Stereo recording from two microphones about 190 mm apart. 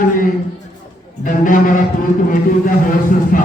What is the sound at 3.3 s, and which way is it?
Speech, 45° left (ahead or behind).